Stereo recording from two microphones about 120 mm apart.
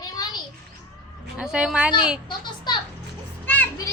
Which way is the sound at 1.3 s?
10° right (ahead or behind).